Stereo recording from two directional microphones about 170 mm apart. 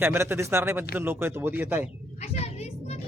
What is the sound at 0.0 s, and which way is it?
Speech, 15° right (ahead or behind).